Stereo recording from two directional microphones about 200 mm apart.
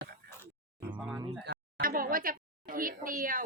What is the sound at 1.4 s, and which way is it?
A woman's voice, 50° right (ahead or behind).